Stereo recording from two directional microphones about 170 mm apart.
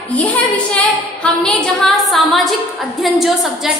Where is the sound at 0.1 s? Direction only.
10° left (ahead or behind).